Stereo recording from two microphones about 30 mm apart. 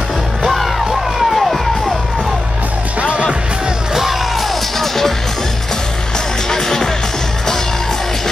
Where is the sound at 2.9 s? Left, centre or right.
Right.